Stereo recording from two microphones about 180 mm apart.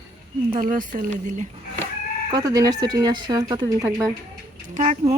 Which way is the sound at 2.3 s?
20° right (ahead or behind).